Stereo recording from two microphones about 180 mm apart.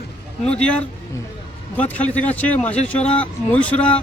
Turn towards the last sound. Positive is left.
turn(degrees=5)  # may be behind; listen again after turning